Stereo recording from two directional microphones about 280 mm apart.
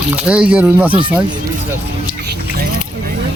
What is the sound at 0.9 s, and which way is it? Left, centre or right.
Speech, centre.